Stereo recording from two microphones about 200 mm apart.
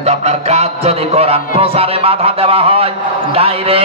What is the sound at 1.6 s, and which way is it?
A man's voice, 30° right (ahead or behind).